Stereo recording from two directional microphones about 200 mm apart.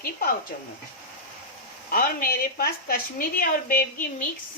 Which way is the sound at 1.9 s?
45° left (ahead or behind).